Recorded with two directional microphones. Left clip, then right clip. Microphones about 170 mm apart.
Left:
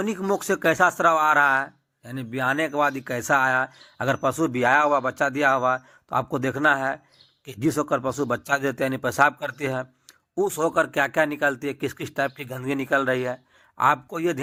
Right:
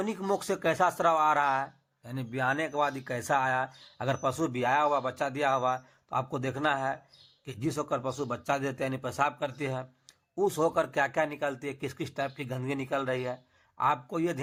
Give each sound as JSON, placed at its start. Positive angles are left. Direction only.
{"t": 0.0, "sound": "speech", "side_deg": 20}